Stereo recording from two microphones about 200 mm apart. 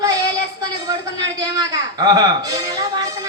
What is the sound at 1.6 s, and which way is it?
Speech, 20° right (ahead or behind).